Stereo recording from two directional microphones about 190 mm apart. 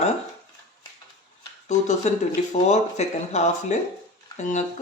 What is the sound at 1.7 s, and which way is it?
Speech, 40° left (ahead or behind).